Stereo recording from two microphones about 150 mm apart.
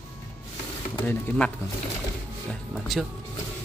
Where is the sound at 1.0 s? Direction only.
15° left (ahead or behind).